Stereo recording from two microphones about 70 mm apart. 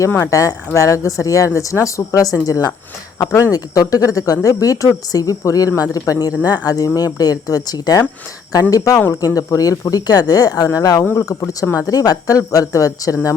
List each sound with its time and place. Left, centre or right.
0.3 s a woman's voice: left
3.2 s a woman's voice: left
3.5 s a woman's voice: left
11.1 s a woman's voice: left
11.9 s speech: left